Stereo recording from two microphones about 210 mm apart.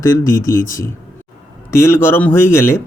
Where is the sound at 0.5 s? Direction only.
40° left (ahead or behind).